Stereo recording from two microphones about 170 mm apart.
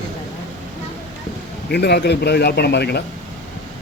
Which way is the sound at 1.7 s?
75° left (ahead or behind).